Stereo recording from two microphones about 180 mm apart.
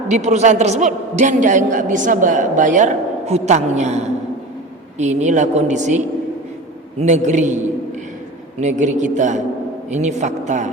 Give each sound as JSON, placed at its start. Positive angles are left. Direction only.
{"t": 0.1, "sound": "a man's voice", "side_deg": -40}
{"t": 7.0, "sound": "a man's voice", "side_deg": -40}
{"t": 8.6, "sound": "a man's voice", "side_deg": -40}